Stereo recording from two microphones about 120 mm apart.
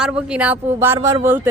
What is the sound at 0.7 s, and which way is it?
Speech, 20° right (ahead or behind).